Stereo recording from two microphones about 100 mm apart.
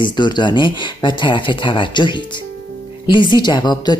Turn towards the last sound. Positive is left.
turn(degrees=45)  # may be behind; listen again after turning